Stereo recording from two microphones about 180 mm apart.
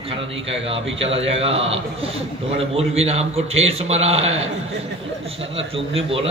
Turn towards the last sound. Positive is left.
turn(degrees=-30)  # may be behind; listen again after turning